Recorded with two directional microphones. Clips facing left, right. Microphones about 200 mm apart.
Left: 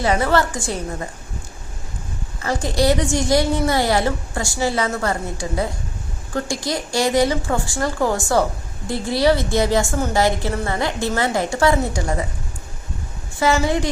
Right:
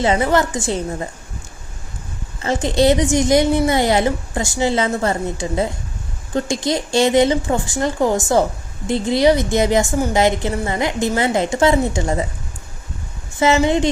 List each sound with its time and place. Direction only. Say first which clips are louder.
0.0 s a woman's voice: right 2 dB; 20° right (ahead or behind)
2.4 s a woman's voice: right 4 dB; 20° right (ahead or behind)
13.4 s a woman's voice: right 3 dB; 20° right (ahead or behind)